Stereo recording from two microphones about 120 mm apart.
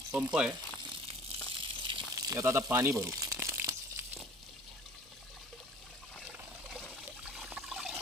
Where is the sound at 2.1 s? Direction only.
30° right (ahead or behind).